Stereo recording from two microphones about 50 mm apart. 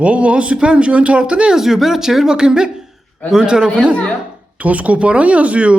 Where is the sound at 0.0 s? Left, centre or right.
Right.